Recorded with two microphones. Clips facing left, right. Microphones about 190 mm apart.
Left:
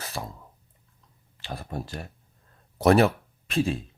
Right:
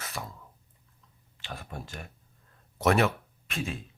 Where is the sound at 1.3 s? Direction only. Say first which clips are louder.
Left 6 dB; 35° left (ahead or behind).